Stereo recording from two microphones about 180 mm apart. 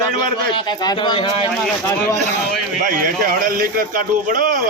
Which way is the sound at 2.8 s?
50° right (ahead or behind).